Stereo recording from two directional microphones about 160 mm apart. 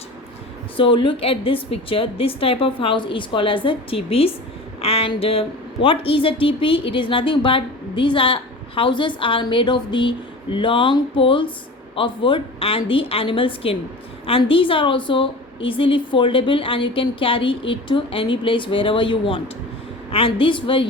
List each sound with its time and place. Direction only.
0.8 s a woman's voice: 30° left (ahead or behind)